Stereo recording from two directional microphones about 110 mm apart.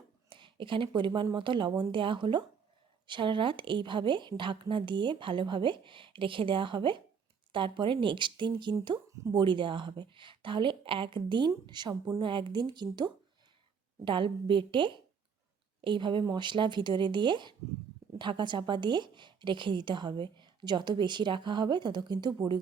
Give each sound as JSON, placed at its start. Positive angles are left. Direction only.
{"t": 0.3, "sound": "a woman's voice", "side_deg": -50}